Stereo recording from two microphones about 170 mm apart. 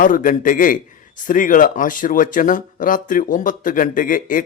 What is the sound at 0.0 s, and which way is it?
Speech, 50° left (ahead or behind).